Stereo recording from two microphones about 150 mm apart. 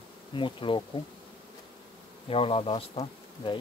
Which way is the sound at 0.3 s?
35° left (ahead or behind).